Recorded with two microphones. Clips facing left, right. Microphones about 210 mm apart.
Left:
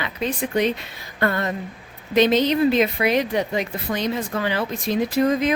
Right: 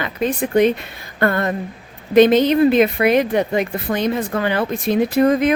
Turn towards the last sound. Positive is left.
turn(degrees=-55)  # may be behind; listen again after turning